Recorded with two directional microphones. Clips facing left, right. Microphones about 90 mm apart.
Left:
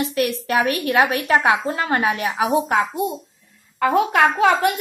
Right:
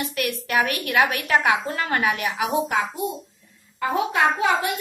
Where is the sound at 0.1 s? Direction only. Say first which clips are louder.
Left 4 dB; 30° left (ahead or behind).